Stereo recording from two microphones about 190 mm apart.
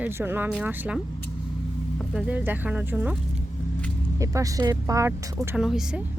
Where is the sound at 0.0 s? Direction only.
10° right (ahead or behind).